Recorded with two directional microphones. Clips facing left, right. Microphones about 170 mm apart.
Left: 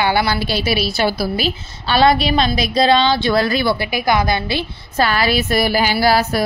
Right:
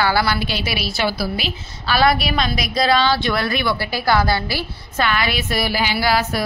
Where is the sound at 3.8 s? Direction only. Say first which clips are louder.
Left 1 dB; 15° left (ahead or behind).